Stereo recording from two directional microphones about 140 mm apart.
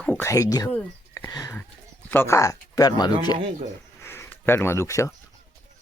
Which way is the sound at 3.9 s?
20° left (ahead or behind).